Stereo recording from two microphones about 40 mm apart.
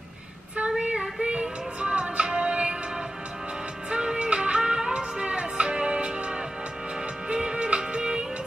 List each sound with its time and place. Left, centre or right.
0.7 s music: right
3.9 s music: right